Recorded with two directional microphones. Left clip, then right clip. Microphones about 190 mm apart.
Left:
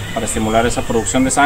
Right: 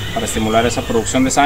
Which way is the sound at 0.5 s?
10° right (ahead or behind).